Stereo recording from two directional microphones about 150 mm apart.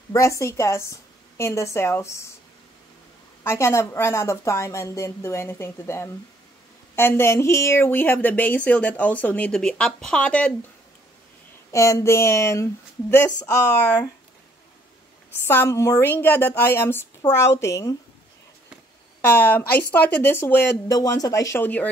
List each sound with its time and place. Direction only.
0.1 s speech: 20° left (ahead or behind)
3.4 s a woman's voice: 20° left (ahead or behind)
11.7 s speech: 20° left (ahead or behind)
15.4 s a woman's voice: 15° left (ahead or behind)
19.2 s a woman's voice: 15° left (ahead or behind)